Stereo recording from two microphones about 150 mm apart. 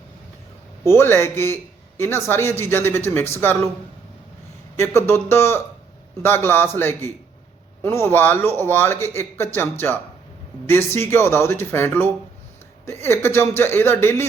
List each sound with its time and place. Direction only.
0.9 s speech: 15° left (ahead or behind)
4.8 s speech: 15° left (ahead or behind)